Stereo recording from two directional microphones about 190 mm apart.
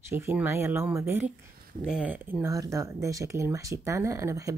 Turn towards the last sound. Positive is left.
turn(degrees=-15)  # may be behind; listen again after turning